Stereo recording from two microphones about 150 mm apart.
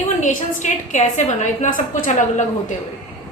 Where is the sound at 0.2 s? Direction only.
55° left (ahead or behind).